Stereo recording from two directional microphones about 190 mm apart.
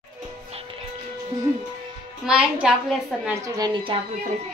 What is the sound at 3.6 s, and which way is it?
Speech, 25° right (ahead or behind).